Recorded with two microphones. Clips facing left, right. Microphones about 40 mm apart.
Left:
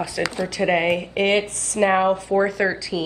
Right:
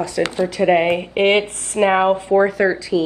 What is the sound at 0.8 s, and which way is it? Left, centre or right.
Speech, right.